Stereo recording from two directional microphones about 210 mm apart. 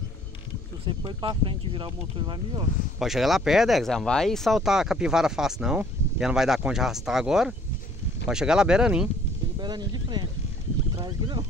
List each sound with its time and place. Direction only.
0.8 s speech: 20° right (ahead or behind)
3.0 s speech: centre (ahead or behind)
9.6 s speech: 20° right (ahead or behind)